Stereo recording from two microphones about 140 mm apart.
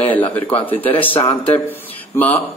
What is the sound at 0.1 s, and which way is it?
Speech, 10° left (ahead or behind).